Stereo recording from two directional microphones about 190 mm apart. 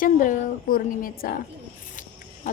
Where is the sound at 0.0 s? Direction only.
45° left (ahead or behind).